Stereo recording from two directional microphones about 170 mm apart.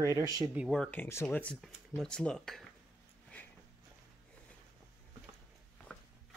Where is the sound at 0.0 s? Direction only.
20° right (ahead or behind).